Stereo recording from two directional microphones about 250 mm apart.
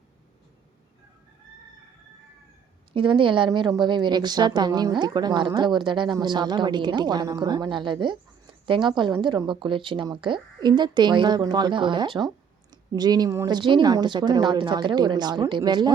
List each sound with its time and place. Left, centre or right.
2.9 s a woman's voice: centre